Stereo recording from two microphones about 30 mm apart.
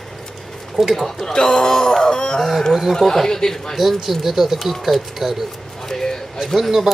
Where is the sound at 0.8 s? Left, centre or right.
Centre.